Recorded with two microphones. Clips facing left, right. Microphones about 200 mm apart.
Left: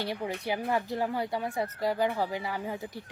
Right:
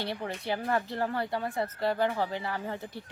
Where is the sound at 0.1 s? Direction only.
15° left (ahead or behind).